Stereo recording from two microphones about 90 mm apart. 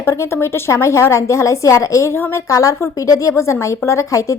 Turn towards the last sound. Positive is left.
turn(degrees=40)  # may be behind; listen again after turning